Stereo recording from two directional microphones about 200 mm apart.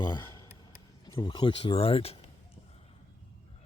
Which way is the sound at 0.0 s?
20° left (ahead or behind).